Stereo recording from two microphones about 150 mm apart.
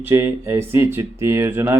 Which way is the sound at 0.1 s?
15° right (ahead or behind).